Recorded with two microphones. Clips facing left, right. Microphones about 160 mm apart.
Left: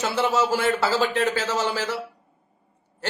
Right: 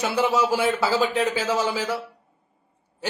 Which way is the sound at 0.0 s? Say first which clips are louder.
Right 1 dB; 15° right (ahead or behind).